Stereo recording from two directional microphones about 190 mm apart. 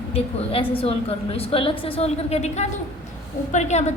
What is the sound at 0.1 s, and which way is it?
A woman's voice, 30° left (ahead or behind).